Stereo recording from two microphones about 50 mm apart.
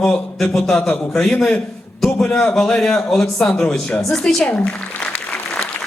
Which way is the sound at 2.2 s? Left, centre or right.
Left.